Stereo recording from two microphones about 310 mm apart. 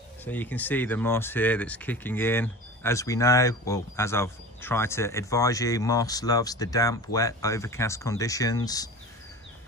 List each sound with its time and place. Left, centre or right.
0.2 s speech: centre